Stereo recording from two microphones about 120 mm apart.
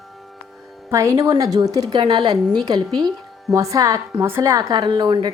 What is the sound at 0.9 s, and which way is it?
A woman's voice, 25° right (ahead or behind).